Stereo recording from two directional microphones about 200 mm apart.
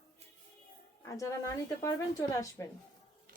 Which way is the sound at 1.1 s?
15° left (ahead or behind).